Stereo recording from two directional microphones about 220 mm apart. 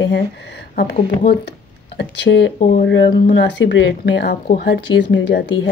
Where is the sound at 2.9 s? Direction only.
55° left (ahead or behind).